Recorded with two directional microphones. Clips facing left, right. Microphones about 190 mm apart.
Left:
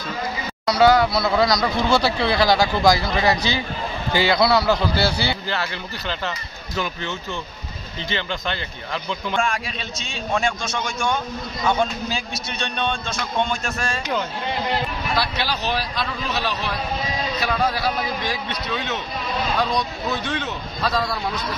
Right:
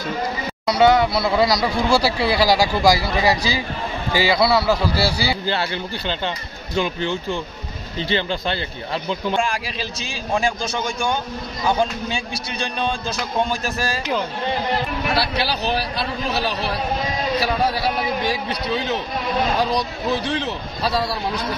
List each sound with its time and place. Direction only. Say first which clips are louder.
0.7 s a man's voice: even; centre (ahead or behind)
5.5 s speech: right 4 dB; 30° right (ahead or behind)
10.4 s speech: right 2 dB; 35° right (ahead or behind)
12.6 s a man's voice: right 1 dB; centre (ahead or behind)
16.0 s speech: right 2 dB; 35° right (ahead or behind)
18.2 s speech: right 4 dB; 35° right (ahead or behind)
20.1 s speech: right 3 dB; 30° right (ahead or behind)